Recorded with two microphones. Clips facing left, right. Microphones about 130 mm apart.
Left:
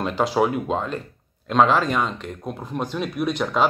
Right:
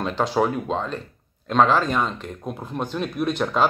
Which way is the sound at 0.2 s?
5° left (ahead or behind).